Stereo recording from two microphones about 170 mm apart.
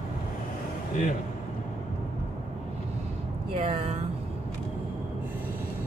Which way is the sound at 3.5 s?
40° right (ahead or behind).